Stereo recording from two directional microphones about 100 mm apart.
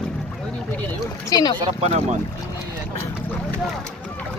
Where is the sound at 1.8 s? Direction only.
90° right.